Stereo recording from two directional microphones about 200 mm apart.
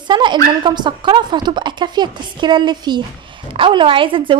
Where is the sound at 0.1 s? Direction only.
20° right (ahead or behind).